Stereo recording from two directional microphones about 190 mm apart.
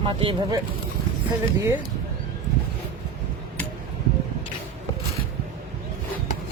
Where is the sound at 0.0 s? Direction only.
30° right (ahead or behind).